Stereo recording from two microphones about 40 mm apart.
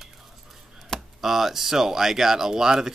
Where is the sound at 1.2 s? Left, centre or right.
Centre.